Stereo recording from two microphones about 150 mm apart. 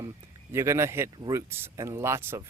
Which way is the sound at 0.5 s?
15° right (ahead or behind).